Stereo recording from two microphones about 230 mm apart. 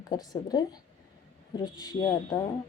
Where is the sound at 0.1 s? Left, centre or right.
Centre.